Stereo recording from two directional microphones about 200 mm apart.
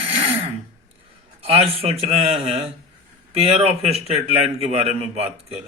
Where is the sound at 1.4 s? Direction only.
30° right (ahead or behind).